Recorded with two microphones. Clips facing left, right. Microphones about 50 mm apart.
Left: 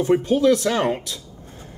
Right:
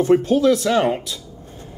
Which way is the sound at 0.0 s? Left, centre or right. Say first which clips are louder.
Right 2 dB; centre.